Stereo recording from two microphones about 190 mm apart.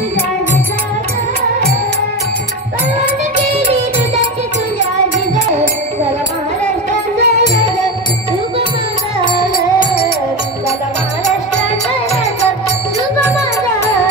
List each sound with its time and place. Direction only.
3.3 s music: 35° right (ahead or behind)
6.9 s music: 40° right (ahead or behind)